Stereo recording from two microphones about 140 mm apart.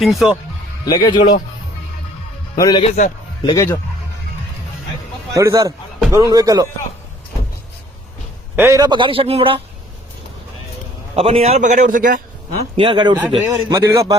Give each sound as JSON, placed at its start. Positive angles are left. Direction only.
{"t": 0.0, "sound": "speech", "side_deg": 0}
{"t": 0.9, "sound": "a man's voice", "side_deg": 30}
{"t": 2.6, "sound": "a man's voice", "side_deg": 25}
{"t": 5.3, "sound": "a man's voice", "side_deg": -20}
{"t": 8.5, "sound": "a man's voice", "side_deg": -20}
{"t": 11.1, "sound": "a man's voice", "side_deg": -45}
{"t": 12.7, "sound": "a man's voice", "side_deg": -40}